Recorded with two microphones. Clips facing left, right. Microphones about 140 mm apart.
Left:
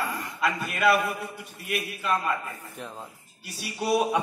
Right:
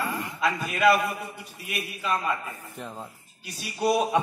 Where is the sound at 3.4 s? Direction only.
Centre (ahead or behind).